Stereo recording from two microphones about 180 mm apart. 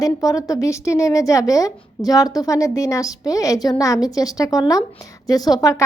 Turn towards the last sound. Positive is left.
turn(degrees=20)  # may be behind; listen again after turning